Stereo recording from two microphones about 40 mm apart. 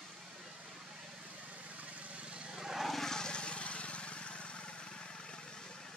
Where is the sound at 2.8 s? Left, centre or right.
Centre.